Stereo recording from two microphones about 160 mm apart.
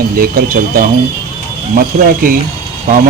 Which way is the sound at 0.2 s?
60° right (ahead or behind).